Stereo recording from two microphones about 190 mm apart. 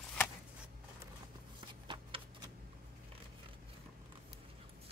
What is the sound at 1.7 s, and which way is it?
Shuffling cards, 25° right (ahead or behind).